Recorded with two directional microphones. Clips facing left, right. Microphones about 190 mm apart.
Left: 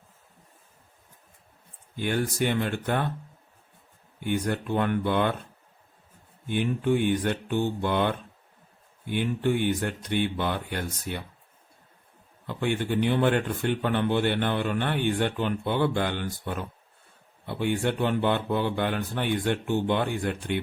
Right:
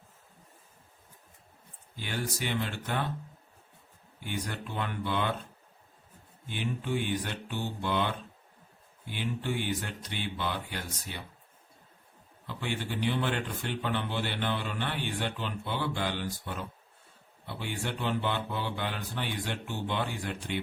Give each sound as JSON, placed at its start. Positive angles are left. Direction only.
{"t": 2.0, "sound": "speech", "side_deg": 55}
{"t": 4.2, "sound": "speech", "side_deg": 55}
{"t": 6.5, "sound": "speech", "side_deg": 55}
{"t": 12.5, "sound": "speech", "side_deg": 55}